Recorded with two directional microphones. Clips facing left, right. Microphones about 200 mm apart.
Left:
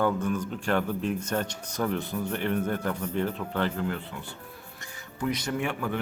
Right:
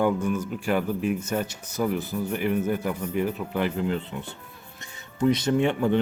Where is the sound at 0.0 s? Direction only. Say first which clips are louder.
Right 3 dB; 10° right (ahead or behind).